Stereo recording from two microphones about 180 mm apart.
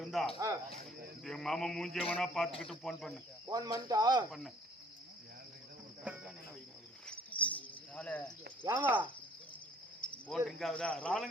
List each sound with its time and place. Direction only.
0.0 s cricket: centre (ahead or behind)
0.3 s speech: 20° right (ahead or behind)
1.2 s a sound: 5° left (ahead or behind)
3.4 s speech: 20° right (ahead or behind)
4.3 s a sound: centre (ahead or behind)
6.1 s speech: 5° right (ahead or behind)
7.1 s cricket: 5° left (ahead or behind)
8.7 s speech: 10° right (ahead or behind)
10.0 s cricket: 5° left (ahead or behind)